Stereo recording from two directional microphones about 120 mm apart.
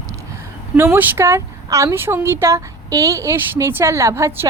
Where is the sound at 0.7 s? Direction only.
20° right (ahead or behind).